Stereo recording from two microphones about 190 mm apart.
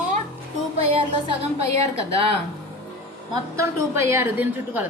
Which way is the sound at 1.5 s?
30° right (ahead or behind).